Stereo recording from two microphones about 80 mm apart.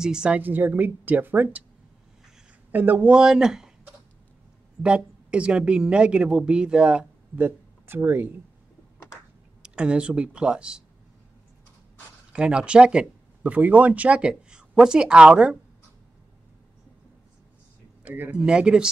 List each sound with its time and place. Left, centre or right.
0.0 s speech: centre
0.4 s speech: right
2.7 s speech: right
3.3 s speech: centre; by 8.3 s right
9.6 s speech: centre
12.3 s speech: centre
18.0 s speech: right